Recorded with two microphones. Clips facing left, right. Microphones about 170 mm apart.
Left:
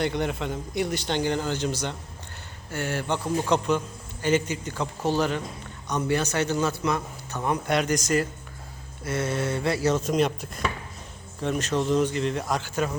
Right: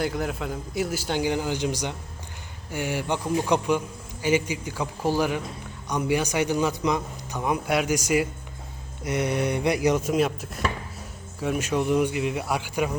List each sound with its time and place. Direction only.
0.0 s a man's voice: centre (ahead or behind)